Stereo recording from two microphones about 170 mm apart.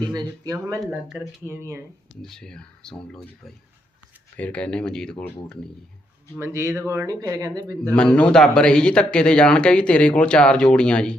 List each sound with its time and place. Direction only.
0.1 s speech: 20° right (ahead or behind)
2.2 s speech: 5° left (ahead or behind)
4.4 s speech: 10° left (ahead or behind)
6.4 s speech: 15° right (ahead or behind)
7.9 s speech: 5° left (ahead or behind)